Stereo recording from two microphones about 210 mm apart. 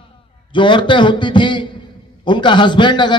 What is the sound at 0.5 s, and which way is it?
A man's voice, 25° left (ahead or behind).